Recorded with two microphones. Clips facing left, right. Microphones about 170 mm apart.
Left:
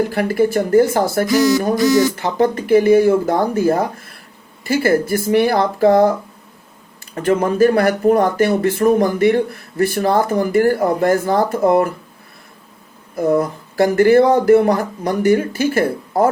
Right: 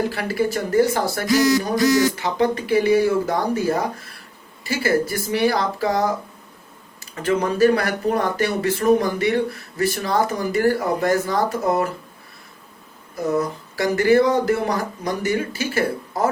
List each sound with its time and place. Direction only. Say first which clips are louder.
0.1 s speech: left 6 dB; 50° left (ahead or behind)
7.2 s speech: left 4 dB; 50° left (ahead or behind)
13.1 s speech: left 6 dB; 55° left (ahead or behind)